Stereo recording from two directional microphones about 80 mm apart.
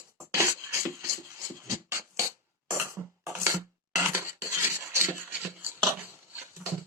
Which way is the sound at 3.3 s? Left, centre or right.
Right.